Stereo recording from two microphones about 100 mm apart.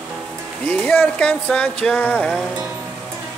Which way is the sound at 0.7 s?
15° left (ahead or behind).